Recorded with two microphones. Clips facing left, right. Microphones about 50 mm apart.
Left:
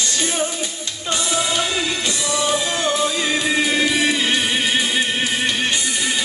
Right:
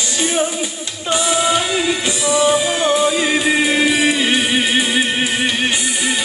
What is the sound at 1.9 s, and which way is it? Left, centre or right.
Music, centre.